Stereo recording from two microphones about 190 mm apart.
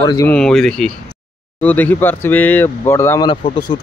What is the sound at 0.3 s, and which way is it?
Speech, 5° left (ahead or behind).